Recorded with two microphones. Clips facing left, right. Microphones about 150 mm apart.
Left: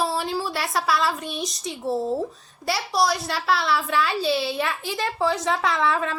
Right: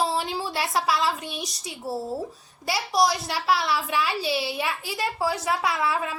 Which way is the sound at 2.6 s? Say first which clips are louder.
Even; 15° right (ahead or behind).